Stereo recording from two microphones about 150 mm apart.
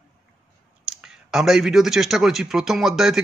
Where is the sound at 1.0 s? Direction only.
Centre (ahead or behind).